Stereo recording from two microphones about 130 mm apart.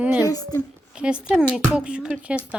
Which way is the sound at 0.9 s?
10° right (ahead or behind).